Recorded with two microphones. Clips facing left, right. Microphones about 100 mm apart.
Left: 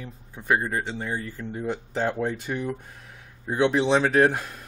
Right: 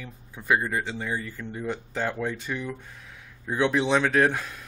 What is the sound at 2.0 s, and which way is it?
Speech, 25° left (ahead or behind).